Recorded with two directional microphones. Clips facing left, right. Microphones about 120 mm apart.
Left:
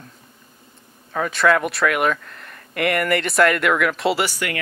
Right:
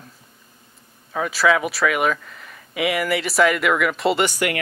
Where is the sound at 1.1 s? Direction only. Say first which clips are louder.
Left 1 dB; 5° right (ahead or behind).